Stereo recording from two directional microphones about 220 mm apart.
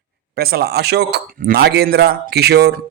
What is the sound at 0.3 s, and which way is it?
Speech, 45° right (ahead or behind).